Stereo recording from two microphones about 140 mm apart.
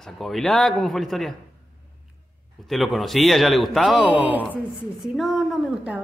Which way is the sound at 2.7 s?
Centre (ahead or behind).